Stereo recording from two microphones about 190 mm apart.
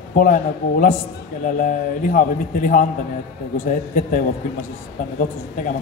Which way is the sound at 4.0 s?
45° left (ahead or behind).